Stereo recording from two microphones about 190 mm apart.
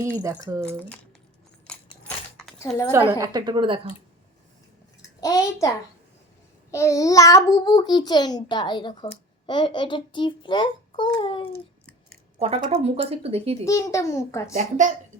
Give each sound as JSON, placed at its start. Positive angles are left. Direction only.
{"t": 0.2, "sound": "speech", "side_deg": -15}
{"t": 1.6, "sound": "keys jangling", "side_deg": 5}
{"t": 3.1, "sound": "a woman's voice", "side_deg": -20}
{"t": 5.2, "sound": "a child's voice", "side_deg": 20}
{"t": 12.4, "sound": "speech", "side_deg": -35}
{"t": 13.7, "sound": "a child's voice", "side_deg": 15}
{"t": 14.5, "sound": "speech", "side_deg": -40}